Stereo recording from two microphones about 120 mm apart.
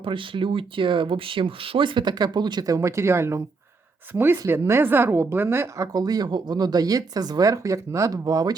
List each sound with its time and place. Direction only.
0.0 s a woman's voice: 45° right (ahead or behind)